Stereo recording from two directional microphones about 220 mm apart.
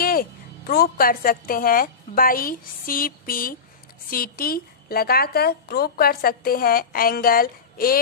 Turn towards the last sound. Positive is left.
turn(degrees=40)  # may be behind; listen again after turning